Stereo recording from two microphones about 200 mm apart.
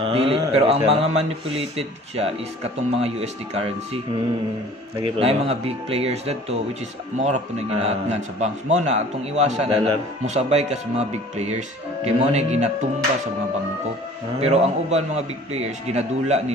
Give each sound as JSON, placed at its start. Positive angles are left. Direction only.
{"t": 0.0, "sound": "a man's voice", "side_deg": -30}
{"t": 14.4, "sound": "a man's voice", "side_deg": -30}